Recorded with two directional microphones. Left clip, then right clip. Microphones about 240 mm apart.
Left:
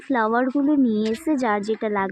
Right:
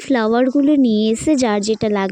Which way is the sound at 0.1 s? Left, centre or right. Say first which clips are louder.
Right 5 dB; right.